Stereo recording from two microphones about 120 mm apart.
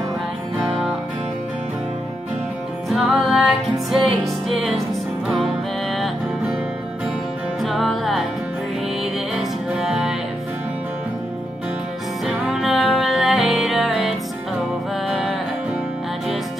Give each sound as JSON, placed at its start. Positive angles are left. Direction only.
{"t": 0.6, "sound": "music", "side_deg": 0}
{"t": 2.9, "sound": "music", "side_deg": 0}
{"t": 5.9, "sound": "music", "side_deg": 0}
{"t": 7.6, "sound": "music", "side_deg": 0}
{"t": 9.3, "sound": "music", "side_deg": -5}
{"t": 12.3, "sound": "music", "side_deg": -5}